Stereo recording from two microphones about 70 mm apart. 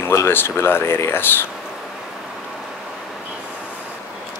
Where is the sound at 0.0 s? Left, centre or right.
Left.